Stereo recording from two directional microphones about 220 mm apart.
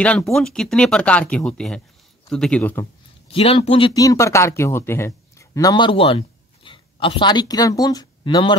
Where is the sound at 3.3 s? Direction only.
25° left (ahead or behind).